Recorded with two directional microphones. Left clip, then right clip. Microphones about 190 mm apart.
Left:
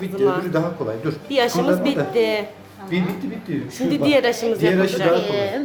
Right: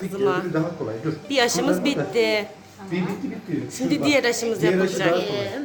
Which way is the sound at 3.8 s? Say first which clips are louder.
Left 3 dB; 10° left (ahead or behind).